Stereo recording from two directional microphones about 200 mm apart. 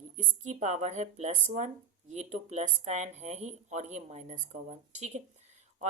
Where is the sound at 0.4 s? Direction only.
35° right (ahead or behind).